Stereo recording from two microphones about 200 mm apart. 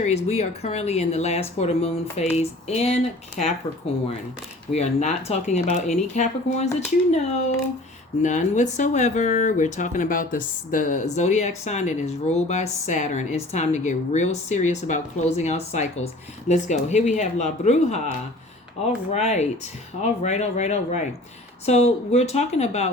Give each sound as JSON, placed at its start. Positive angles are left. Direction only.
{"t": 0.0, "sound": "speech", "side_deg": 30}
{"t": 19.1, "sound": "speech", "side_deg": 35}